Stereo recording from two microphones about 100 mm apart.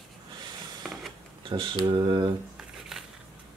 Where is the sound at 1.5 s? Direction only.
60° right (ahead or behind).